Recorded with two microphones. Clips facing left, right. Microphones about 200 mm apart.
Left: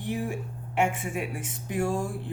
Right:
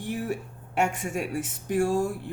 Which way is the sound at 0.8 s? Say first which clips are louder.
Even; 45° right (ahead or behind).